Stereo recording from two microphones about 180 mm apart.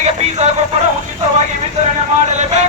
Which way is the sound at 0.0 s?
40° right (ahead or behind).